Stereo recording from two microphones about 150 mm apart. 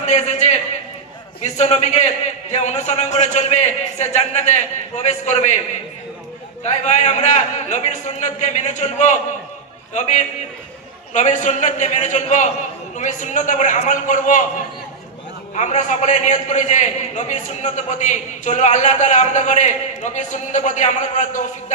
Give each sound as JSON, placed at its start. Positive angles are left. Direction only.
{"t": 0.0, "sound": "a man's voice", "side_deg": 50}
{"t": 6.7, "sound": "a man's voice", "side_deg": 50}
{"t": 15.5, "sound": "a man's voice", "side_deg": 50}